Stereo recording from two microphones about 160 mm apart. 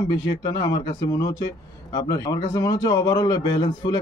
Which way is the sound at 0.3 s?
25° left (ahead or behind).